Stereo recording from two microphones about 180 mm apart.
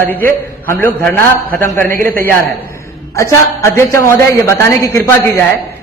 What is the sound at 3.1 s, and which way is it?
A woman's voice, 15° left (ahead or behind).